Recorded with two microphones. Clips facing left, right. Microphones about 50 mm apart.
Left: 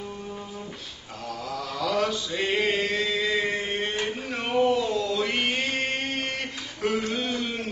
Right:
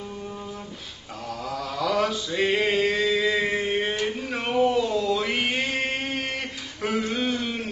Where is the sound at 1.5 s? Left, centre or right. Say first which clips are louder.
Right 2 dB; centre.